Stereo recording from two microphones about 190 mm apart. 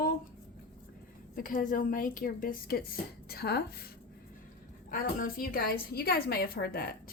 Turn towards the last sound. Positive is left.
turn(degrees=55)  # may be behind; listen again after turning